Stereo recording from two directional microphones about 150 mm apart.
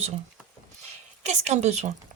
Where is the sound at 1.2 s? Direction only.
50° right (ahead or behind).